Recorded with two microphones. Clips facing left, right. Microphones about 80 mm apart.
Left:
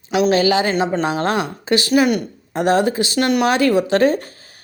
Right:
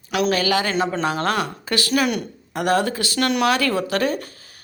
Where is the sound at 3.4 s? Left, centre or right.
Left.